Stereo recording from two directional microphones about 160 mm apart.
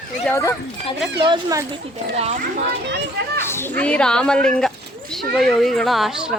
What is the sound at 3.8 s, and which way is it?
Speech, 5° left (ahead or behind).